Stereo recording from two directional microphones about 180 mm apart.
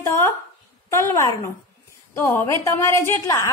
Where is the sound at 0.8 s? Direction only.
15° left (ahead or behind).